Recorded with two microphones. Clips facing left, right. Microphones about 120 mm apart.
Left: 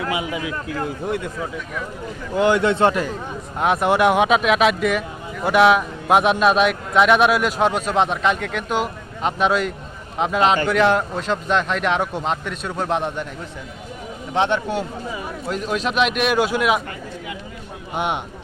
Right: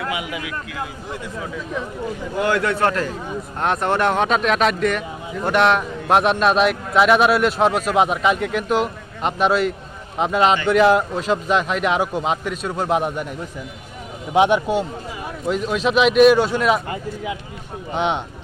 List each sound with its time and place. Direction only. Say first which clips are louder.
0.1 s a man's voice: left 2 dB; 25° left (ahead or behind)
0.9 s speech: left 7 dB; 55° left (ahead or behind)
2.4 s a man's voice: left 3 dB; 20° left (ahead or behind)
3.6 s speech: left 3 dB; 5° left (ahead or behind)
14.3 s speech: right 4 dB; 10° right (ahead or behind)
15.4 s speech: right 4 dB; centre (ahead or behind)
17.9 s speech: right 2 dB; 10° left (ahead or behind)